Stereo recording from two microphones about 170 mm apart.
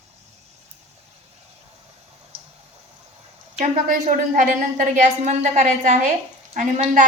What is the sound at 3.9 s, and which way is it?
A woman's voice, 50° right (ahead or behind).